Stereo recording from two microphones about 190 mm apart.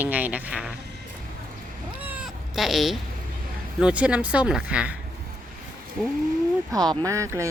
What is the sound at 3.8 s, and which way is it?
Speech, 5° right (ahead or behind).